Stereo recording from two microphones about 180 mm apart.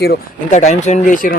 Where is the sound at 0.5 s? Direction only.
40° left (ahead or behind).